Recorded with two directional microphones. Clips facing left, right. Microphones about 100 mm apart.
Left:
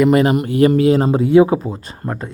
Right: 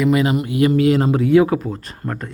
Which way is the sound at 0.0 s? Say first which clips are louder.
Left 4 dB; 45° left (ahead or behind).